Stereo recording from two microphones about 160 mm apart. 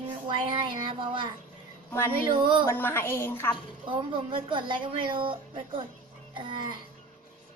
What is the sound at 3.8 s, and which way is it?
Speech, 30° right (ahead or behind).